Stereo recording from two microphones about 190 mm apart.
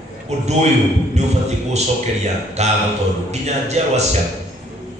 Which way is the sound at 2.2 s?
35° right (ahead or behind).